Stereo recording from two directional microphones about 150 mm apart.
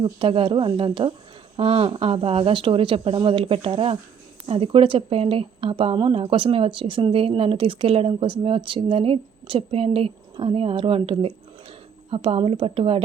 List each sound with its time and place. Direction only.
0.0 s speech: 35° right (ahead or behind)